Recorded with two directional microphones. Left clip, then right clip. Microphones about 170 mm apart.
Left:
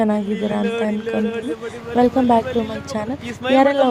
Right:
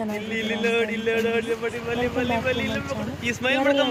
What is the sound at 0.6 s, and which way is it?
Speech, 25° left (ahead or behind).